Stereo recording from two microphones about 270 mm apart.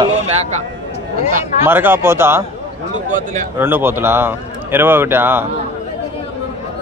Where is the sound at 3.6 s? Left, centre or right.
Centre.